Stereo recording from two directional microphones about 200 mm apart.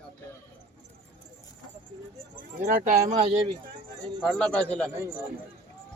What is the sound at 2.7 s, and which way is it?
Speech, 40° right (ahead or behind).